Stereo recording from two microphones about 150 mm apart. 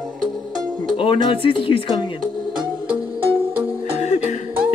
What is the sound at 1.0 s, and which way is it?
Speech, 35° left (ahead or behind).